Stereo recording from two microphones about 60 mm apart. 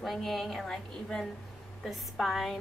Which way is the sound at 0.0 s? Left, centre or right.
Centre.